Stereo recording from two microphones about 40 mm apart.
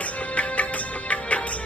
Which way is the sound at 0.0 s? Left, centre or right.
Left.